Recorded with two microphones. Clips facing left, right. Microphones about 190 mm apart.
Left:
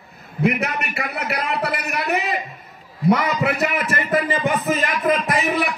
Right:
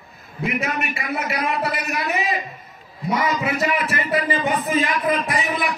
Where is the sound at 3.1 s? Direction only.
65° left (ahead or behind); by 5.6 s 45° left (ahead or behind).